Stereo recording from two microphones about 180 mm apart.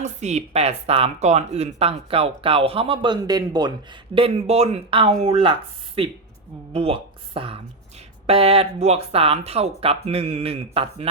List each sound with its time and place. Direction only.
0.0 s speech: 40° right (ahead or behind)
6.7 s speech: 30° right (ahead or behind)